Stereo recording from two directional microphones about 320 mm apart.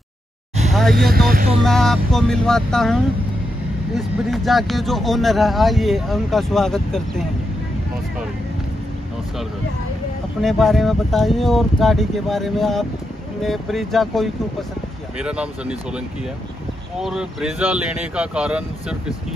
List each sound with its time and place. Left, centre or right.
0.7 s vehicle: centre
1.1 s music: right
1.6 s speech: centre
10.4 s speech: centre
17.0 s speech: centre